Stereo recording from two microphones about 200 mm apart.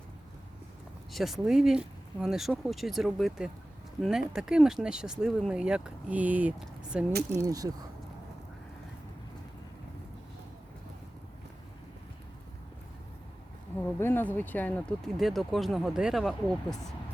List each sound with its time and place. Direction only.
1.1 s speech: centre (ahead or behind)
7.4 s speech: 20° right (ahead or behind)
13.8 s speech: 10° left (ahead or behind)